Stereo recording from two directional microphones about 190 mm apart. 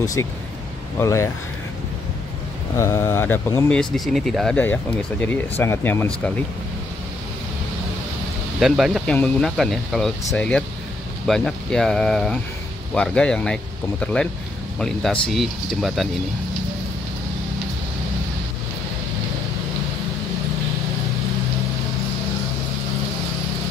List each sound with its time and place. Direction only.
0.0 s speech: 15° left (ahead or behind)
2.8 s speech: 15° left (ahead or behind)
3.6 s speech: 5° left (ahead or behind)
8.5 s speech: centre (ahead or behind)